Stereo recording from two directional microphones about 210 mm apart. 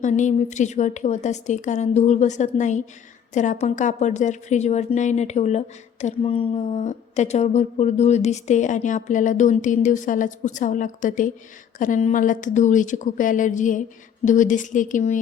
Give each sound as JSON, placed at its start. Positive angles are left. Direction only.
{"t": 0.0, "sound": "a woman's voice", "side_deg": 35}